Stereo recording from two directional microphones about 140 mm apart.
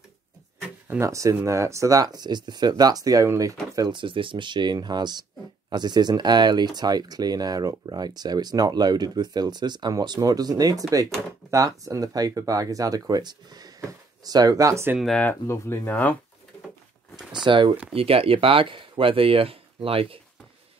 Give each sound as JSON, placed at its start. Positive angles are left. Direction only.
{"t": 0.6, "sound": "speech", "side_deg": -15}
{"t": 15.0, "sound": "speech", "side_deg": 0}
{"t": 15.2, "sound": "speech", "side_deg": 20}
{"t": 17.5, "sound": "speech", "side_deg": -35}